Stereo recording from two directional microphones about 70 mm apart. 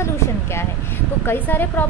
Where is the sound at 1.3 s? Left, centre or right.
Left.